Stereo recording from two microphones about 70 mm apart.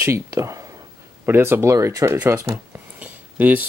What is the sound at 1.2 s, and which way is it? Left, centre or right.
Speech, right.